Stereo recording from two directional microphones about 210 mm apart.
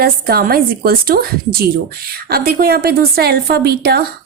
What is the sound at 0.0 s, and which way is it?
A woman's voice, 45° right (ahead or behind).